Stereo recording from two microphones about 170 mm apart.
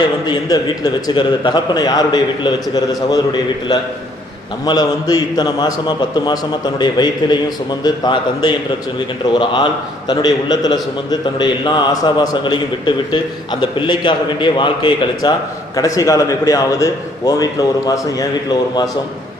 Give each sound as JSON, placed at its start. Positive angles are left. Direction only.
{"t": 0.0, "sound": "a man's voice", "side_deg": 25}